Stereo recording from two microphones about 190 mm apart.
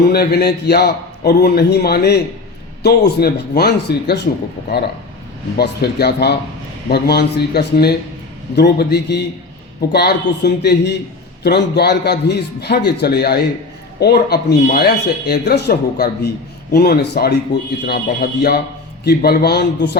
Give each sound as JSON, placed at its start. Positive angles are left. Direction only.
{"t": 0.0, "sound": "speech", "side_deg": 55}
{"t": 5.5, "sound": "speech", "side_deg": 55}